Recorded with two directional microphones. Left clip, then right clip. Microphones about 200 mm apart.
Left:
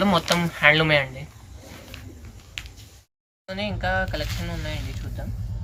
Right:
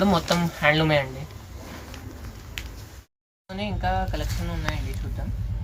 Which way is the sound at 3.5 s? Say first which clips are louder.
Left 2 dB; 5° left (ahead or behind).